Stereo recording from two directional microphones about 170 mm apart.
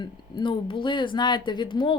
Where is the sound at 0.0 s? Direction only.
25° left (ahead or behind).